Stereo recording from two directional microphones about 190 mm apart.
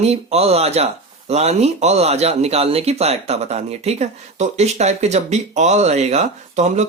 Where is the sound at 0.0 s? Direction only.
35° right (ahead or behind).